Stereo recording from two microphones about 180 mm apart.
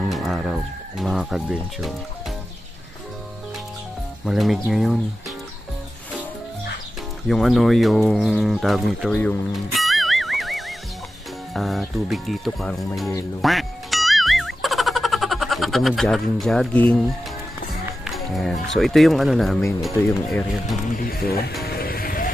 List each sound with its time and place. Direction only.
0.1 s speech: centre (ahead or behind)
4.2 s speech: centre (ahead or behind)
7.2 s speech: centre (ahead or behind)
9.1 s speech: 10° left (ahead or behind)
9.5 s music: centre (ahead or behind)
11.5 s speech: centre (ahead or behind)
13.4 s music: centre (ahead or behind)
18.0 s speech: centre (ahead or behind)
21.0 s music: 55° left (ahead or behind)